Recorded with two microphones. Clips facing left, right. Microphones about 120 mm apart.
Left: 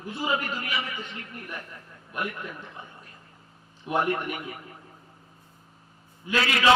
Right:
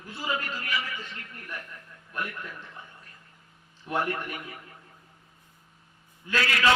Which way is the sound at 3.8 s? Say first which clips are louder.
Left 4 dB; 20° left (ahead or behind).